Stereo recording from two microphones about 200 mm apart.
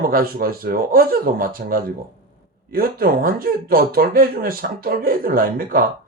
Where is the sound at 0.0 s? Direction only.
45° right (ahead or behind).